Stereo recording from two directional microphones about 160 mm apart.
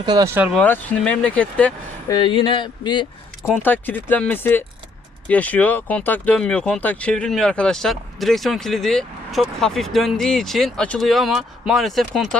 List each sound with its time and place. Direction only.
0.0 s speech: 25° right (ahead or behind)
0.5 s speech: 10° left (ahead or behind)
2.0 s speech: 25° left (ahead or behind)
3.4 s speech: 10° left (ahead or behind)